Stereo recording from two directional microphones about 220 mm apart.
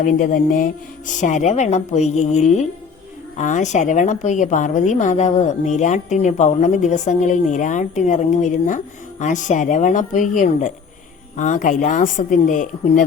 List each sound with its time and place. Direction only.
0.0 s a woman's voice: 40° left (ahead or behind)